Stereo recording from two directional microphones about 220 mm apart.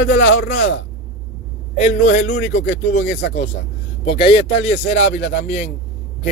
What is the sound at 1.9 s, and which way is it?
Speech, 35° left (ahead or behind).